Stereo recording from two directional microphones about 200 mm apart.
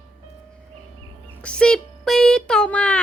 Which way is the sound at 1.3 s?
5° left (ahead or behind).